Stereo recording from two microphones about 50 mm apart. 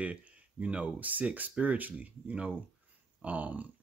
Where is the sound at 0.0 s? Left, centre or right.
Right.